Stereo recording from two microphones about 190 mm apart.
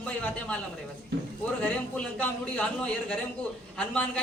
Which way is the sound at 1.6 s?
5° left (ahead or behind).